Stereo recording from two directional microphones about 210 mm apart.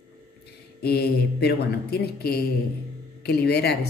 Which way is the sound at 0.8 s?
50° left (ahead or behind).